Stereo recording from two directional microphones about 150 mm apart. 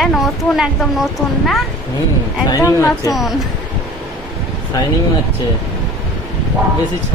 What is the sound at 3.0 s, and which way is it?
Speech, centre (ahead or behind).